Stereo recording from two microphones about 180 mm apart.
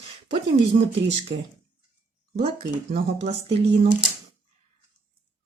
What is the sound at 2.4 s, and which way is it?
Speech, 35° right (ahead or behind).